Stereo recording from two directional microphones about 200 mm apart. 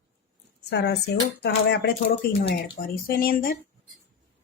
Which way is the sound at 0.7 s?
55° left (ahead or behind).